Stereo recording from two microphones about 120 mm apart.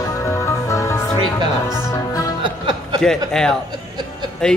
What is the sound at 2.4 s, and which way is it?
Music, 40° right (ahead or behind).